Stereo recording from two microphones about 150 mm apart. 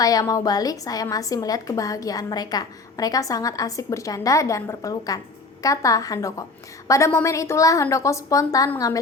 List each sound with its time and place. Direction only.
0.0 s a woman's voice: 25° left (ahead or behind)